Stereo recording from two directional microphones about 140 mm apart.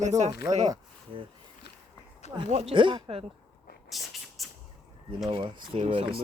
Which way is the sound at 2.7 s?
35° right (ahead or behind).